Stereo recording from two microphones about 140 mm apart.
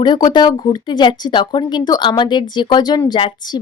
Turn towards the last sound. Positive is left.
turn(degrees=30)  # may be behind; listen again after turning